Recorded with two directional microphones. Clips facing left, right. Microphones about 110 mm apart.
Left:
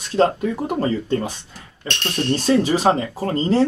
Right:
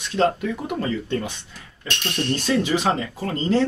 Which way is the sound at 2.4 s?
35° left (ahead or behind).